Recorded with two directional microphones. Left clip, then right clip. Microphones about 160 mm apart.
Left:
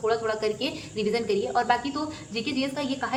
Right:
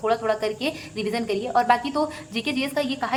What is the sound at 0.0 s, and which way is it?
A woman's voice, 30° right (ahead or behind).